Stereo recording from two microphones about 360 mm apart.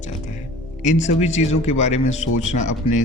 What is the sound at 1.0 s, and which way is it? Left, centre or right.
Speech, centre.